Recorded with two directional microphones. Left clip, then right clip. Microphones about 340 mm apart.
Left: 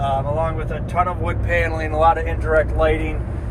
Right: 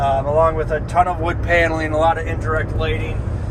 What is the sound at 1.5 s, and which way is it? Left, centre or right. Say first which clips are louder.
Speech: right 5 dB; centre.